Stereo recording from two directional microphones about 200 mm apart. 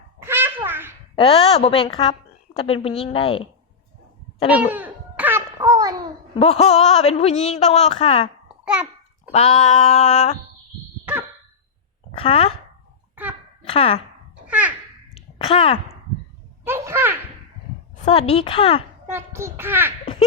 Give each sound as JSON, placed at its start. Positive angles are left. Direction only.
{"t": 0.2, "sound": "a sound", "side_deg": -10}
{"t": 1.1, "sound": "a woman's voice", "side_deg": 30}
{"t": 4.4, "sound": "babbling", "side_deg": -5}
{"t": 6.4, "sound": "speech", "side_deg": 30}
{"t": 8.6, "sound": "babbling", "side_deg": -5}
{"t": 9.3, "sound": "speech", "side_deg": 30}
{"t": 12.1, "sound": "a woman's voice", "side_deg": 30}
{"t": 13.1, "sound": "a sound", "side_deg": -10}
{"t": 13.7, "sound": "speech", "side_deg": 30}
{"t": 14.4, "sound": "babbling", "side_deg": -5}
{"t": 15.4, "sound": "a woman's voice", "side_deg": 30}
{"t": 16.6, "sound": "a sound", "side_deg": -10}
{"t": 18.0, "sound": "a woman's voice", "side_deg": 30}
{"t": 19.0, "sound": "a child's voice", "side_deg": -10}